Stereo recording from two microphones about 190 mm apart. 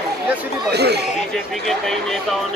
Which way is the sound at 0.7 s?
60° right (ahead or behind).